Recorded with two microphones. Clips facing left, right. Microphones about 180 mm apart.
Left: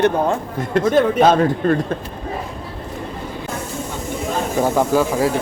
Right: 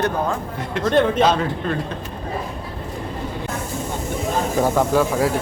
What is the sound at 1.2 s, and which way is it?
Speech, 45° left (ahead or behind).